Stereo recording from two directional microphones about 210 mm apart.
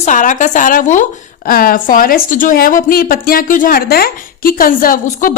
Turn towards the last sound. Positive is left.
turn(degrees=40)  # may be behind; listen again after turning